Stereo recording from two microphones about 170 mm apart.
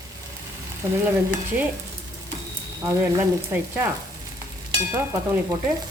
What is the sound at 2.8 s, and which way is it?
Speech, 20° right (ahead or behind).